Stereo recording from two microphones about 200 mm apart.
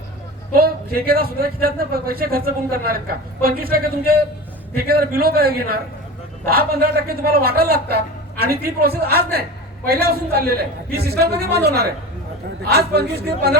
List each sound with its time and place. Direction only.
0.5 s a man's voice: 50° right (ahead or behind)